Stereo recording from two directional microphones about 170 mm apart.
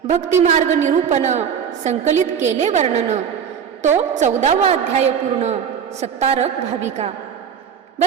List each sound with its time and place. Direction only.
0.4 s a woman's voice: 45° right (ahead or behind)